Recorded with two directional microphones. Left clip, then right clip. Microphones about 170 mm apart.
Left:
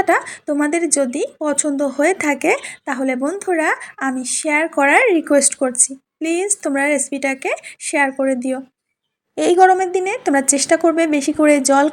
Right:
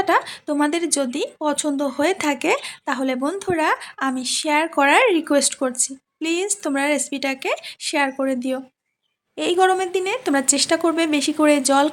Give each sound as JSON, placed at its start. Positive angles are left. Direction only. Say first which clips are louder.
{"t": 0.0, "sound": "speech", "louder": "left 3 dB", "side_deg": 5}
{"t": 9.3, "sound": "a woman's voice", "louder": "left 6 dB", "side_deg": 20}
{"t": 9.6, "sound": "a woman's voice", "louder": "left 5 dB", "side_deg": 5}